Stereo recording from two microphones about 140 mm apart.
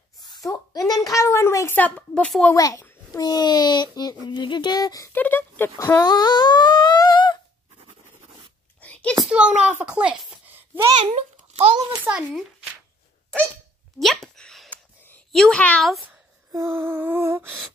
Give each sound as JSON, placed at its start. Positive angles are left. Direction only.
{"t": 0.2, "sound": "a woman's voice", "side_deg": 25}
{"t": 2.0, "sound": "a woman's voice", "side_deg": 10}
{"t": 2.5, "sound": "a child's voice", "side_deg": 25}
{"t": 5.1, "sound": "speech", "side_deg": 15}
{"t": 5.9, "sound": "humming", "side_deg": 30}
{"t": 7.7, "sound": "writing", "side_deg": -45}
{"t": 8.8, "sound": "a sound", "side_deg": 10}
{"t": 9.2, "sound": "a child's voice", "side_deg": -5}
{"t": 11.0, "sound": "a child's voice", "side_deg": -45}
{"t": 12.0, "sound": "humming", "side_deg": -10}
{"t": 13.9, "sound": "a sound", "side_deg": 0}
{"t": 15.3, "sound": "speech", "side_deg": 5}
{"t": 16.5, "sound": "humming", "side_deg": -15}